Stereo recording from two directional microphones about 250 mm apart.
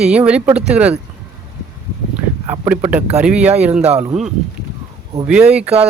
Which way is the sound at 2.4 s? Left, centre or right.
Centre.